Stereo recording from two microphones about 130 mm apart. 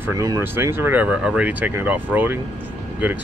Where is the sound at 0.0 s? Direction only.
25° right (ahead or behind).